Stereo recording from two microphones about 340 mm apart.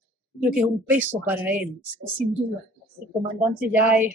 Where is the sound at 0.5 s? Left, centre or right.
Centre.